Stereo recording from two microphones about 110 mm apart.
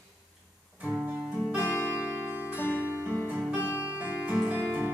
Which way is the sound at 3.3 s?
15° right (ahead or behind).